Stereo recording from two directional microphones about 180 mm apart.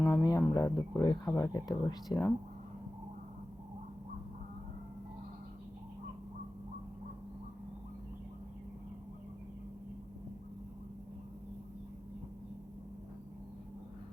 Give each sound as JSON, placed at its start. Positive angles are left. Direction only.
{"t": 0.0, "sound": "speech", "side_deg": 15}